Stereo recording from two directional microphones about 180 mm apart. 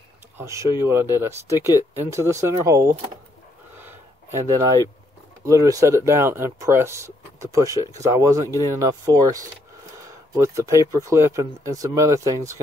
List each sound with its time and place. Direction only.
0.4 s speech: 15° right (ahead or behind)
3.7 s a sound: 15° right (ahead or behind)
5.4 s speech: 20° right (ahead or behind)